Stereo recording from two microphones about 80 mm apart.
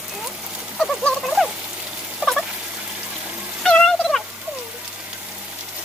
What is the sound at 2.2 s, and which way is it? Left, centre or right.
Fowl, centre.